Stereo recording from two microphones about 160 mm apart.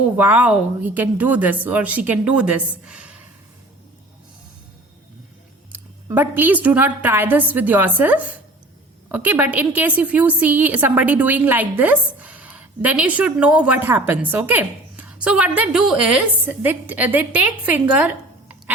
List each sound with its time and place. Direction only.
0.2 s a woman's voice: 10° right (ahead or behind)
6.1 s a woman's voice: 10° right (ahead or behind)